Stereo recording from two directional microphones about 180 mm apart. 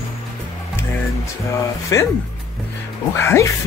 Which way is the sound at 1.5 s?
15° left (ahead or behind).